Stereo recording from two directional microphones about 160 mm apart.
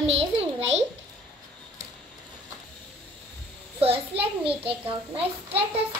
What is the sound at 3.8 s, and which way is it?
A child's voice, 35° right (ahead or behind).